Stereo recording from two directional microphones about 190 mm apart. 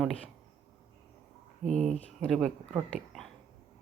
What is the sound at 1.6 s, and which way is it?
Speech, 35° right (ahead or behind).